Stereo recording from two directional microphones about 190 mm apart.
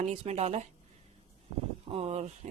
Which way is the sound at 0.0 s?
35° right (ahead or behind).